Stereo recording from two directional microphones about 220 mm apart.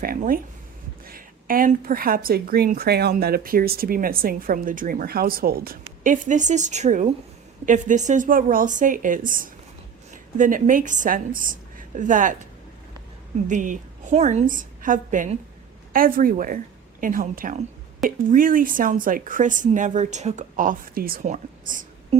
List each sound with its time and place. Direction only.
0.0 s a woman's voice: 40° right (ahead or behind)
13.5 s a woman's voice: 35° right (ahead or behind)